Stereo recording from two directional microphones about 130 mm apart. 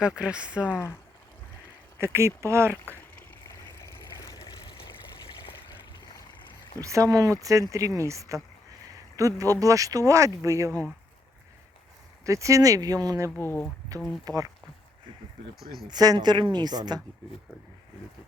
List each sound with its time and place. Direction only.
0.2 s speech: 10° right (ahead or behind)
0.6 s speech: 20° left (ahead or behind)
2.0 s speech: 20° right (ahead or behind)
3.2 s a sound: 20° left (ahead or behind)
6.8 s speech: 25° right (ahead or behind)
12.2 s speech: 25° right (ahead or behind)
13.3 s speech: 15° left (ahead or behind)
14.3 s speech: 25° right (ahead or behind)
15.9 s a woman's voice: 30° right (ahead or behind)